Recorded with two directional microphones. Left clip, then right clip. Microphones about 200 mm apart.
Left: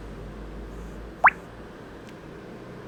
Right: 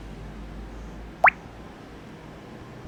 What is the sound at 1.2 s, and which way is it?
Plop, 5° right (ahead or behind).